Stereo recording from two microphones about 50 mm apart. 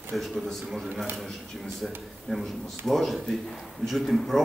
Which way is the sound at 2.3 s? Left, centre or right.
Centre.